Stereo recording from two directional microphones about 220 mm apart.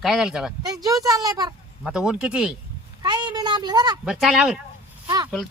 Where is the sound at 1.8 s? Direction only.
5° right (ahead or behind).